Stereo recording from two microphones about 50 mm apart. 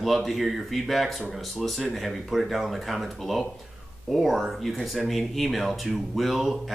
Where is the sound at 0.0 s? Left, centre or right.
Centre.